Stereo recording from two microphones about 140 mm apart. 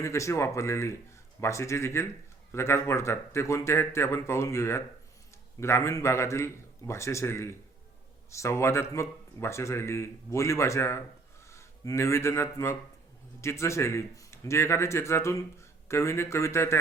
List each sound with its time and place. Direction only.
0.0 s speech: 20° left (ahead or behind)